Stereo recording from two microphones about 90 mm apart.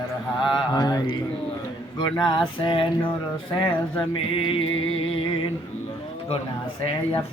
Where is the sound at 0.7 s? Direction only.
45° left (ahead or behind).